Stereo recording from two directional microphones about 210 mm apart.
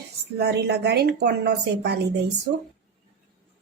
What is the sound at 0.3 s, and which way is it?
Speech, 50° right (ahead or behind).